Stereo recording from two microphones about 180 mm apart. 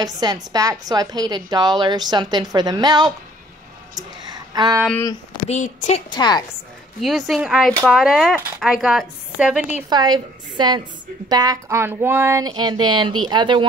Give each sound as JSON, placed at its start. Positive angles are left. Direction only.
{"t": 0.0, "sound": "a woman's voice", "side_deg": -20}
{"t": 4.3, "sound": "a sound", "side_deg": -20}
{"t": 5.5, "sound": "a woman's voice", "side_deg": 40}
{"t": 6.0, "sound": "a woman's voice", "side_deg": 25}
{"t": 7.0, "sound": "speech", "side_deg": 0}
{"t": 9.8, "sound": "a woman's voice", "side_deg": -25}